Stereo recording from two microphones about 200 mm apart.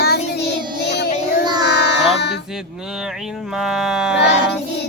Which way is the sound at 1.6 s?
55° left (ahead or behind).